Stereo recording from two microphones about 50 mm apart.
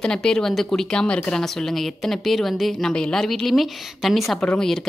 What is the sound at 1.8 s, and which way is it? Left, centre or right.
Speech, centre.